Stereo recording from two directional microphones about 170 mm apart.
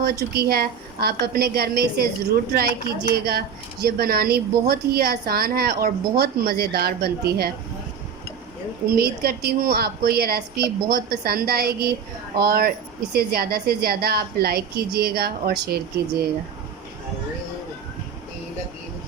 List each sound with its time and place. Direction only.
0.0 s a woman's voice: 65° right (ahead or behind)
9.0 s a woman's voice: 65° right (ahead or behind)